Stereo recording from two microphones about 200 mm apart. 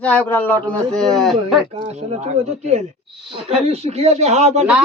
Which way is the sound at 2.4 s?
35° right (ahead or behind).